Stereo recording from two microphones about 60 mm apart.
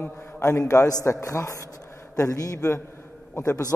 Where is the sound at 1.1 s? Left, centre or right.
Left.